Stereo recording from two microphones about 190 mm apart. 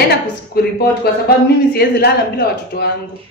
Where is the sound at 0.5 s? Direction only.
55° left (ahead or behind).